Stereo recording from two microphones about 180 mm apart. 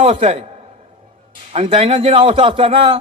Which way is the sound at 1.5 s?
35° right (ahead or behind).